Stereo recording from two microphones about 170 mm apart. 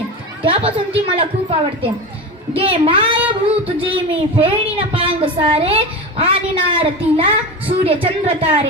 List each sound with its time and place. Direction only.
0.4 s speech: 35° right (ahead or behind)